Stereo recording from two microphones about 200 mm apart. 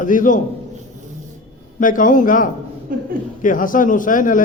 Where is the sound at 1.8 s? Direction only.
40° left (ahead or behind).